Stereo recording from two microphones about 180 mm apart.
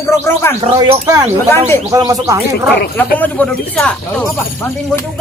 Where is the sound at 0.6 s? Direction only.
25° right (ahead or behind).